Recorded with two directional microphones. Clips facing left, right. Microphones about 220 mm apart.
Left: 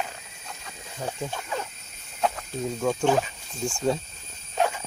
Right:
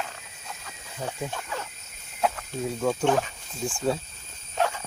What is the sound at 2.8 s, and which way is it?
Speech, centre (ahead or behind).